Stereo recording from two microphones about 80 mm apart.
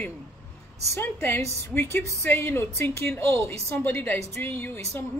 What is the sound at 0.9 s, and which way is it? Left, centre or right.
A woman's voice, left.